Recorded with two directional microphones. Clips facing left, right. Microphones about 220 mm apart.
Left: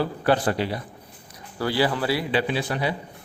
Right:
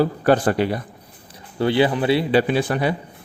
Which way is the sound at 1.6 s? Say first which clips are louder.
Right 5 dB; 20° right (ahead or behind).